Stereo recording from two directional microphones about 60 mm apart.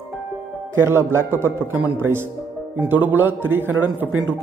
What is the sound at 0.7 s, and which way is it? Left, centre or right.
Speech, right.